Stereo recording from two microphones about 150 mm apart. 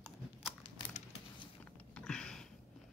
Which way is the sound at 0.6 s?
40° left (ahead or behind).